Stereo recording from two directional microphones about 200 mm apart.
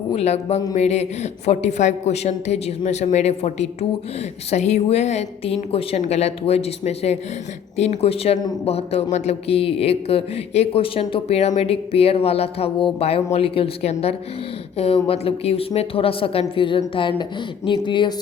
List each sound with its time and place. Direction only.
0.1 s a man's voice: 30° left (ahead or behind)